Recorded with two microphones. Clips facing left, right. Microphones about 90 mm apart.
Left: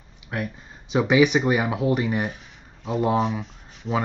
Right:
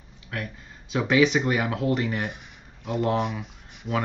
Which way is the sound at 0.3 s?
20° left (ahead or behind).